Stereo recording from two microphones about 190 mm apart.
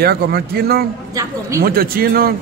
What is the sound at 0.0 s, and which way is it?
A man's voice, 55° right (ahead or behind).